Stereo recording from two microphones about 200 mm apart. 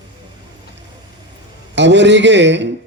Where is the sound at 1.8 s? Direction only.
60° right (ahead or behind).